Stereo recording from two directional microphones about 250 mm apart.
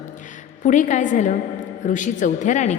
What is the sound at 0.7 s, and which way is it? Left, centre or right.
A woman's voice, left.